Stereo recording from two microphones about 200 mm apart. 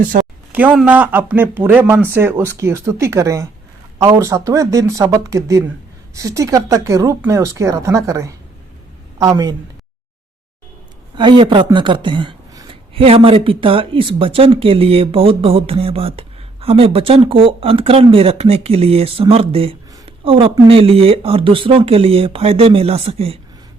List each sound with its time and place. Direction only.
0.1 s a sound: 45° right (ahead or behind)
0.5 s a woman's voice: 5° right (ahead or behind)
11.2 s speech: 25° right (ahead or behind)